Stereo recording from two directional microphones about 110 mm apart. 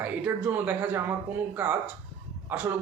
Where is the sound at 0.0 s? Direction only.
15° right (ahead or behind).